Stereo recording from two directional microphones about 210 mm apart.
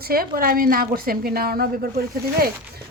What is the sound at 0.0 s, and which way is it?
A woman's voice, 45° right (ahead or behind).